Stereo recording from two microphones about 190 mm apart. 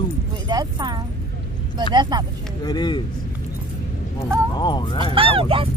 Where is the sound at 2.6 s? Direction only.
20° left (ahead or behind).